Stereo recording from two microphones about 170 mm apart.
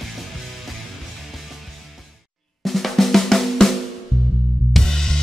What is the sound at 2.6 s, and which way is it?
Drum, centre (ahead or behind).